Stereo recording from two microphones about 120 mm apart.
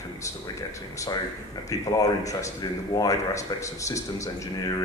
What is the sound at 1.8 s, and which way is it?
Speech, 30° left (ahead or behind).